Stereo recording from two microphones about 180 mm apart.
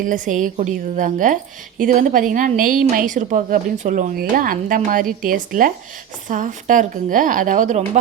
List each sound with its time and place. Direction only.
0.0 s a woman's voice: 45° right (ahead or behind)